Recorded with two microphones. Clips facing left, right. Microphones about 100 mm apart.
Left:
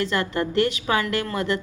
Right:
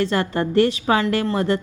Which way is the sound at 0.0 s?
35° right (ahead or behind).